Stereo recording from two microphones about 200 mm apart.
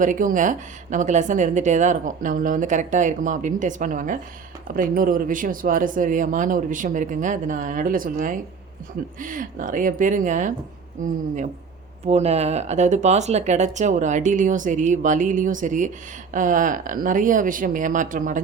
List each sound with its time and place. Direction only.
0.0 s speech: 40° right (ahead or behind)
12.0 s speech: 30° right (ahead or behind)